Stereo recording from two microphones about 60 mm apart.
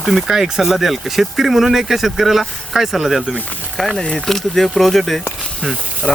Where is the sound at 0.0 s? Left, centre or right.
Centre.